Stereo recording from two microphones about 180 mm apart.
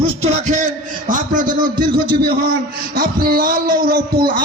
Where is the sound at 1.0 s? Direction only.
45° right (ahead or behind).